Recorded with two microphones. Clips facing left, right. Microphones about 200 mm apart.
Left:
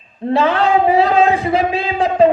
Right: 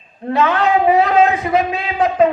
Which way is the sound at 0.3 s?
30° left (ahead or behind).